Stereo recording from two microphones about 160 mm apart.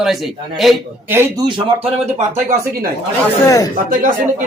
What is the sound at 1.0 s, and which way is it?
Speech, 15° right (ahead or behind).